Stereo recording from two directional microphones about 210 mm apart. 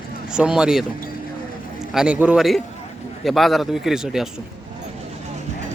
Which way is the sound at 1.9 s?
5° right (ahead or behind).